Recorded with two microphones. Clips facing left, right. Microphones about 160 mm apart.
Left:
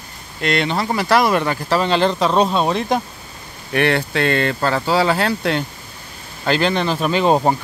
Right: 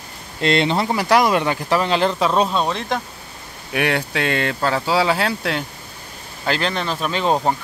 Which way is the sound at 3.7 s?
10° right (ahead or behind).